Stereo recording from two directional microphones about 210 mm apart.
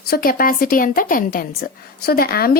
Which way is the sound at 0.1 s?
45° left (ahead or behind).